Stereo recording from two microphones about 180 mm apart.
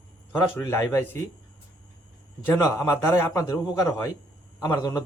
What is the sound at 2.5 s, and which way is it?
A man's voice, 15° left (ahead or behind).